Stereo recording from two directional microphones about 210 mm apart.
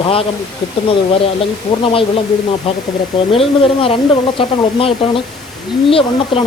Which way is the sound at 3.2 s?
25° left (ahead or behind).